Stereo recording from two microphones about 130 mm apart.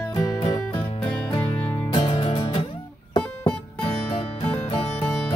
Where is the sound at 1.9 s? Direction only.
40° left (ahead or behind).